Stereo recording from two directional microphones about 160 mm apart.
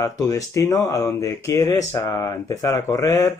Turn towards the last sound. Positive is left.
turn(degrees=20)  # may be behind; listen again after turning